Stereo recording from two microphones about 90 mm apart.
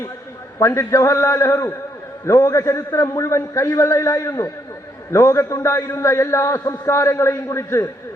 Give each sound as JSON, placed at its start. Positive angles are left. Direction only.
{"t": 0.6, "sound": "a man's voice", "side_deg": 30}